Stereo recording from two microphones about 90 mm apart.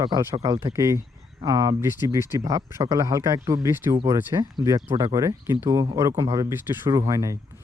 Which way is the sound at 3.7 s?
25° right (ahead or behind).